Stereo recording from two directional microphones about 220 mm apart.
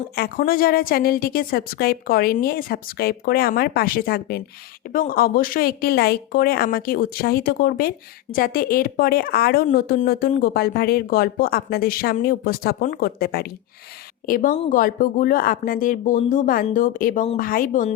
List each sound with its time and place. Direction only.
0.2 s speech: 40° left (ahead or behind)